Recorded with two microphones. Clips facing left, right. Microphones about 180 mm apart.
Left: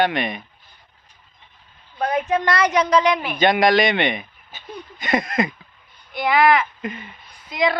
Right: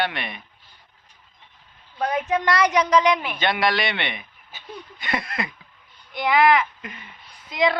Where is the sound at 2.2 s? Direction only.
15° right (ahead or behind).